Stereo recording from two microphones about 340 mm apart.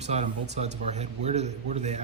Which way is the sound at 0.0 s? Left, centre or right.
Centre.